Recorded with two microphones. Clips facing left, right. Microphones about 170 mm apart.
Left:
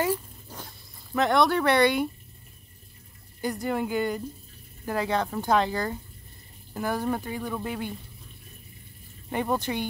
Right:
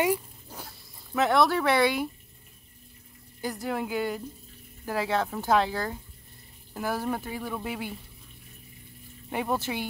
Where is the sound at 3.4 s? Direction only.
Centre (ahead or behind).